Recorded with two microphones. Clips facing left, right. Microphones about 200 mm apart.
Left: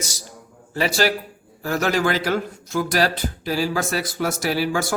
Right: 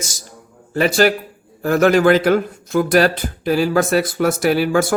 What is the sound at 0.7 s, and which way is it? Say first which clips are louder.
A man's voice: right 6 dB; 55° right (ahead or behind).